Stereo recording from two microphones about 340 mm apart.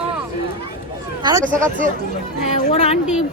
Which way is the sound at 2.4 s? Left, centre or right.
Centre.